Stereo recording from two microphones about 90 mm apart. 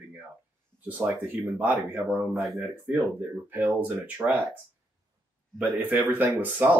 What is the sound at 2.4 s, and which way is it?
Speech, 5° right (ahead or behind).